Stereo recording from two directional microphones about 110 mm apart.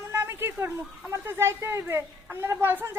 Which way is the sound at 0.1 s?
20° right (ahead or behind).